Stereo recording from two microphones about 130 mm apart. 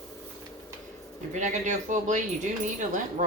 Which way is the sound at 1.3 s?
70° right (ahead or behind).